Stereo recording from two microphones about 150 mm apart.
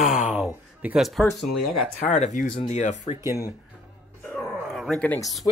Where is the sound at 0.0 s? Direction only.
60° left (ahead or behind).